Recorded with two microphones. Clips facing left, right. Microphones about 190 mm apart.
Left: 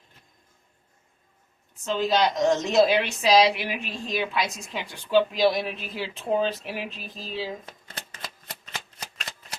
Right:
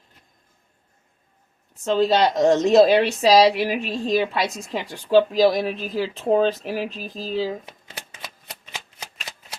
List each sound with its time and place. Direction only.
1.8 s a woman's voice: 35° right (ahead or behind)
7.6 s shuffling cards: 10° right (ahead or behind)